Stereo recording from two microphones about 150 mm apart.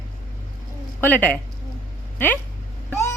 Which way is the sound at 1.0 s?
10° left (ahead or behind).